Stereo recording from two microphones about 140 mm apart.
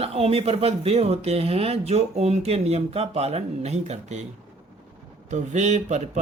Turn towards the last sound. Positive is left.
turn(degrees=-55)  # may be behind; listen again after turning